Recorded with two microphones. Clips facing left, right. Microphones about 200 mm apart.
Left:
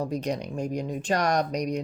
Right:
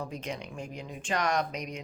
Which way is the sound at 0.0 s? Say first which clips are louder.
Left 8 dB; 40° left (ahead or behind).